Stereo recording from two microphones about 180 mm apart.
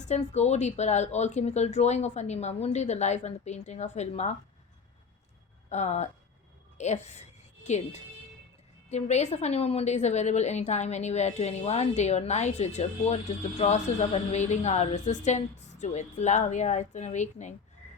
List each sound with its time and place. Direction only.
0.0 s a woman's voice: 40° left (ahead or behind)
5.6 s speech: 40° left (ahead or behind)
6.7 s a sound: 40° left (ahead or behind)
8.9 s a woman's voice: 40° left (ahead or behind)